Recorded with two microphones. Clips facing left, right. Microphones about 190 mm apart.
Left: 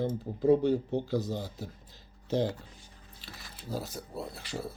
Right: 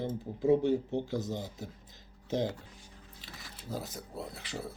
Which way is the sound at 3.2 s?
20° right (ahead or behind).